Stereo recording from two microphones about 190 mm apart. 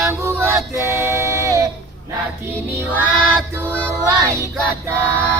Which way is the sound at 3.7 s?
5° left (ahead or behind).